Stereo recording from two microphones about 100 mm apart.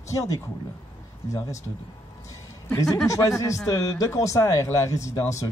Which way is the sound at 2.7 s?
35° left (ahead or behind).